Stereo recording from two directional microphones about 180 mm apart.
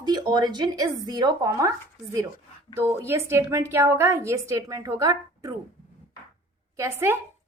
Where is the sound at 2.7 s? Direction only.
15° right (ahead or behind).